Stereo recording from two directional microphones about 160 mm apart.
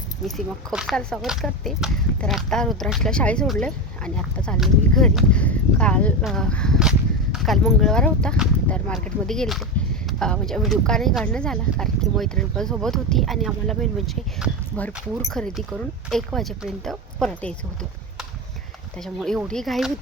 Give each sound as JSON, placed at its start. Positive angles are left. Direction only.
{"t": 0.3, "sound": "speech", "side_deg": 0}
{"t": 14.7, "sound": "speech", "side_deg": 10}
{"t": 18.9, "sound": "speech", "side_deg": 5}